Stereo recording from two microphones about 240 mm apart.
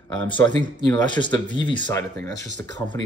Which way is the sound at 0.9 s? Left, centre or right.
Centre.